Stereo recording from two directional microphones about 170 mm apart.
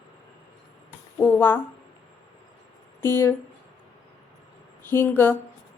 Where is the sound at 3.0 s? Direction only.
15° left (ahead or behind).